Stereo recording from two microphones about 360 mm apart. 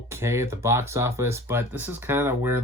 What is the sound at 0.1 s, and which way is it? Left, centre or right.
Speech, centre.